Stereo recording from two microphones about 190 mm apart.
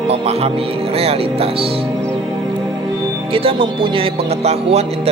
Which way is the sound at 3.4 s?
30° right (ahead or behind).